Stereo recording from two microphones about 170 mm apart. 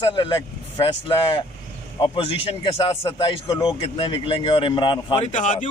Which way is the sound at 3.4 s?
20° left (ahead or behind).